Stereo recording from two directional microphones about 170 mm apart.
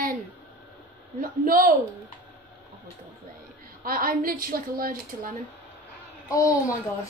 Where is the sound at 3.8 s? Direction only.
55° right (ahead or behind).